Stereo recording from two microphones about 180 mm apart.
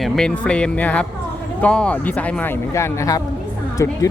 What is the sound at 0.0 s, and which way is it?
A woman's voice, 5° left (ahead or behind).